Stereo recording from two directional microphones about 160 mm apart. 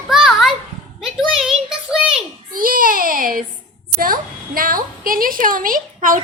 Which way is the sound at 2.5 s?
60° right (ahead or behind).